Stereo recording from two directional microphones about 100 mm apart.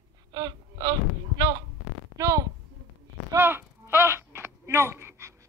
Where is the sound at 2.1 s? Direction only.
35° right (ahead or behind).